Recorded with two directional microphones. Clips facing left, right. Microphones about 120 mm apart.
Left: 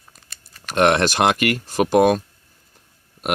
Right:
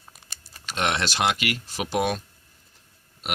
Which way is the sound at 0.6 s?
55° left (ahead or behind).